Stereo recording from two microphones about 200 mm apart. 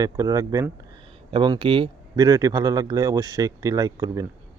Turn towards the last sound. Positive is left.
turn(degrees=-20)  # may be behind; listen again after turning